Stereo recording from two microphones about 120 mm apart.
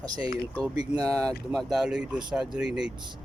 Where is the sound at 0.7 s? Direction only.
30° right (ahead or behind).